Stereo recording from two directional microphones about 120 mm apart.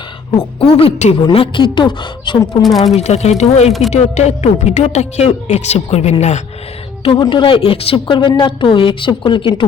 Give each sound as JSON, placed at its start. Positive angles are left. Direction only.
{"t": 0.3, "sound": "a woman's voice", "side_deg": 55}
{"t": 0.9, "sound": "speech", "side_deg": 70}
{"t": 1.4, "sound": "a woman's voice", "side_deg": 45}
{"t": 2.6, "sound": "speech", "side_deg": 0}
{"t": 2.9, "sound": "speech", "side_deg": 65}
{"t": 3.7, "sound": "speech", "side_deg": 0}
{"t": 3.9, "sound": "speech", "side_deg": 70}
{"t": 7.0, "sound": "a woman's voice", "side_deg": 50}